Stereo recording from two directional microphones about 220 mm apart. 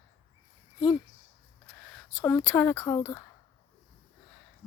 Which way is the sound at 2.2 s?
5° left (ahead or behind).